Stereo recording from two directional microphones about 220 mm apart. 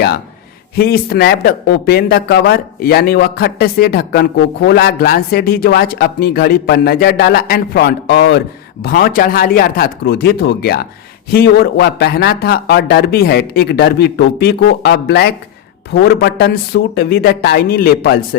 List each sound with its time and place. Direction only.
0.8 s speech: 45° left (ahead or behind)